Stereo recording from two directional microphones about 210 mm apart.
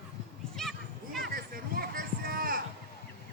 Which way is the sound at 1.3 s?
45° right (ahead or behind).